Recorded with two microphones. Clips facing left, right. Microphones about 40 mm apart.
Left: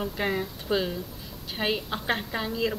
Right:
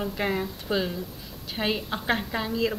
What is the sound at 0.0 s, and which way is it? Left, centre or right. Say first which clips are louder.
A woman's voice: right 1 dB; centre.